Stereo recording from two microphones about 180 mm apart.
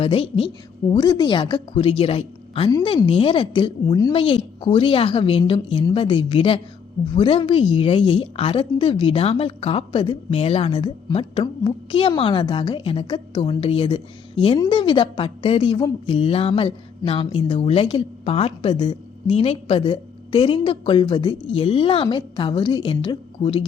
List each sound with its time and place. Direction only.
0.0 s a woman's voice: 30° left (ahead or behind)